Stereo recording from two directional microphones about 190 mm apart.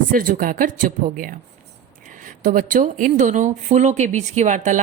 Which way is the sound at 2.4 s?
45° right (ahead or behind).